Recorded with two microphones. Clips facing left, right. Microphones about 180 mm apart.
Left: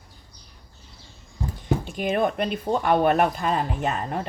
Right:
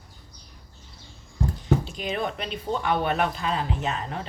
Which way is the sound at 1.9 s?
55° left (ahead or behind).